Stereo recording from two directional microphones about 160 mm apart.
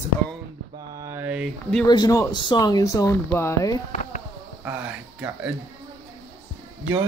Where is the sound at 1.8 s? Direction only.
25° left (ahead or behind).